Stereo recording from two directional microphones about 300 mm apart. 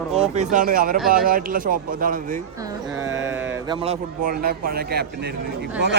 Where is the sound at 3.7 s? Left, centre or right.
Centre.